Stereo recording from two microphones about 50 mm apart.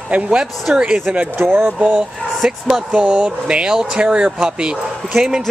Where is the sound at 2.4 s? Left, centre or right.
Centre.